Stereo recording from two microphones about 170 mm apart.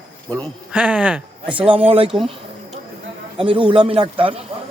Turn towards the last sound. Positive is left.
turn(degrees=-30)  # may be behind; listen again after turning